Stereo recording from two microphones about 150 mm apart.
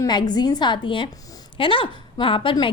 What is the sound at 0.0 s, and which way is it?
A woman's voice, 30° left (ahead or behind).